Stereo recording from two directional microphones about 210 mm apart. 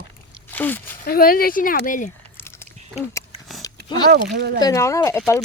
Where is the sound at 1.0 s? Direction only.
45° left (ahead or behind).